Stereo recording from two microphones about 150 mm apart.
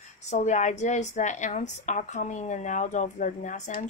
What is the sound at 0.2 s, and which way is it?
Speech, 50° left (ahead or behind).